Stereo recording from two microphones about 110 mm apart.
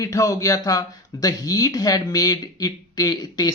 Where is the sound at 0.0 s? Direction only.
30° left (ahead or behind).